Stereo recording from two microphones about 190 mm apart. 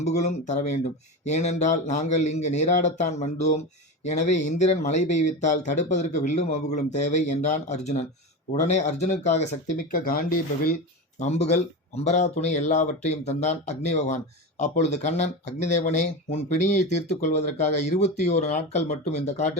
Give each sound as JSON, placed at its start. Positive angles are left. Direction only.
{"t": 0.0, "sound": "speech", "side_deg": 35}
{"t": 11.2, "sound": "speech", "side_deg": 35}